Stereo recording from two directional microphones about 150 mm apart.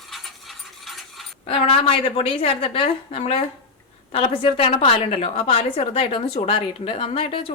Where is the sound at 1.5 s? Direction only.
40° left (ahead or behind).